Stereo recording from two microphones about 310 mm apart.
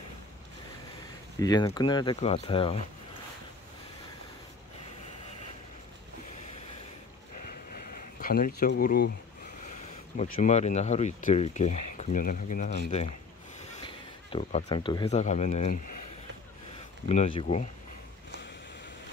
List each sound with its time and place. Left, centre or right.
1.4 s speech: centre
7.4 s a sound: left
10.1 s speech: left
13.8 s a sound: centre
14.7 s speech: centre
17.1 s speech: centre